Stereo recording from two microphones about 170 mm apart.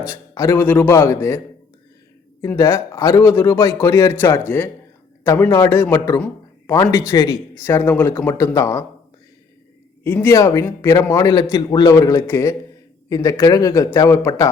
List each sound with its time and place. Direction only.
0.1 s a man's voice: 15° left (ahead or behind)
2.4 s a man's voice: 15° left (ahead or behind)
10.0 s a man's voice: 15° left (ahead or behind)